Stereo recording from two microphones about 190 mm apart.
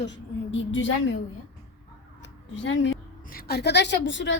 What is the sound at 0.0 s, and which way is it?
A woman's voice, 75° left (ahead or behind).